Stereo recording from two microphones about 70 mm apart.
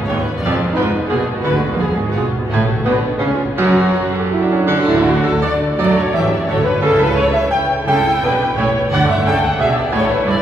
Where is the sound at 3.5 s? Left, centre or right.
Right.